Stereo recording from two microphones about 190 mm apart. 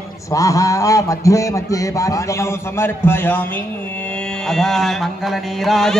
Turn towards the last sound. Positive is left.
turn(degrees=0)  # may be behind; listen again after turning